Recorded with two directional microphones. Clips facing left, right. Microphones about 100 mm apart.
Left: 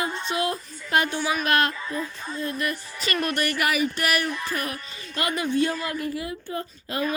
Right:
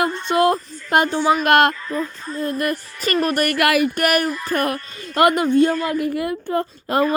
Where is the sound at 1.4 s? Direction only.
60° right (ahead or behind).